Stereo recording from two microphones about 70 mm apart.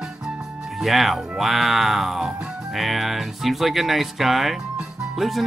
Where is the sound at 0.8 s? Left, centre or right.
Centre.